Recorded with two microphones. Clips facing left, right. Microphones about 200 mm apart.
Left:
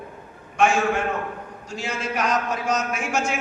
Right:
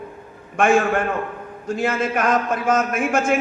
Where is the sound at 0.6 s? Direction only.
55° right (ahead or behind).